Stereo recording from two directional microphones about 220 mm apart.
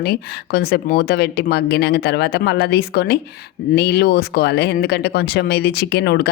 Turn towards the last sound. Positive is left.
turn(degrees=50)  # may be behind; listen again after turning